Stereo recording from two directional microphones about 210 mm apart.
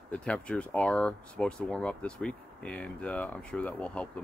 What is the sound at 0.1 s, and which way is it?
Speech, 5° left (ahead or behind).